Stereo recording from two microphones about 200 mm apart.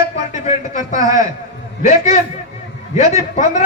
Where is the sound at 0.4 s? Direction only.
40° left (ahead or behind).